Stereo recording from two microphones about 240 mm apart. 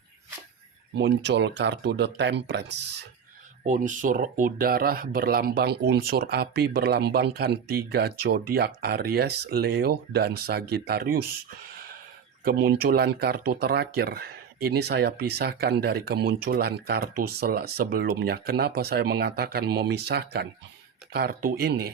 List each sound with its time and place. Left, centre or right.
0.9 s speech: right
3.7 s speech: right
12.5 s speech: right